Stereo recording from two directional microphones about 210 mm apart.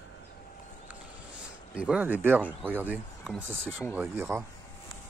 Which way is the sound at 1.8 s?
5° right (ahead or behind).